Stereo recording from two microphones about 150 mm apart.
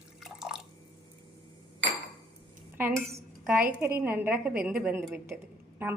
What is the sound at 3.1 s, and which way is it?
A woman's voice, 15° right (ahead or behind).